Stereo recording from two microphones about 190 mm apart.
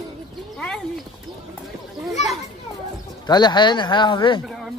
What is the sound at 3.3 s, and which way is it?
Speech, 20° left (ahead or behind).